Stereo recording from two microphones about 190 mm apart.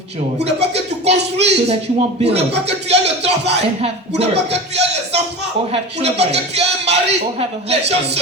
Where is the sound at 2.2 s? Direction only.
35° right (ahead or behind).